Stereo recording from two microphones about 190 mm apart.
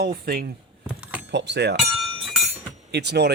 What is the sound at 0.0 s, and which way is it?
Speech, 55° right (ahead or behind).